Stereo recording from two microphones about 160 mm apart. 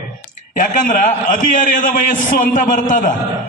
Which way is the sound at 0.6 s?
55° left (ahead or behind).